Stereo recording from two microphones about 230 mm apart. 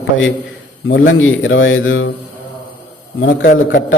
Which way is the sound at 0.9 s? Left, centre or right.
Left.